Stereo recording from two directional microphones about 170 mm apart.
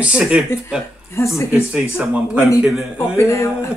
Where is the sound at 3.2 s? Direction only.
15° left (ahead or behind).